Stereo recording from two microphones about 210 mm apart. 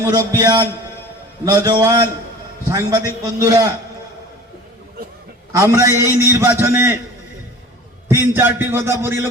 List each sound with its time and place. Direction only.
0.3 s a man's voice: 20° right (ahead or behind)
5.5 s a man's voice: 15° right (ahead or behind)
8.0 s a man's voice: 10° right (ahead or behind)